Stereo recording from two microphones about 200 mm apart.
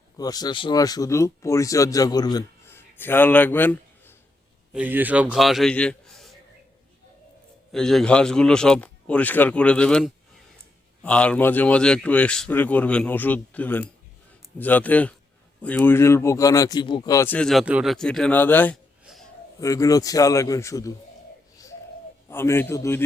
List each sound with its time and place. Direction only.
0.2 s speech: 20° left (ahead or behind)
4.7 s a man's voice: 10° right (ahead or behind)
7.7 s speech: centre (ahead or behind)
21.5 s a sound: 15° left (ahead or behind)
22.3 s speech: 10° left (ahead or behind)